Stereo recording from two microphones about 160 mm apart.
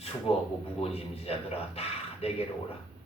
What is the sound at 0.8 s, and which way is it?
Speech, 40° left (ahead or behind).